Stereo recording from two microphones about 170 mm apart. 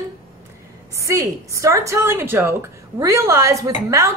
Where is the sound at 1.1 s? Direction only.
20° right (ahead or behind).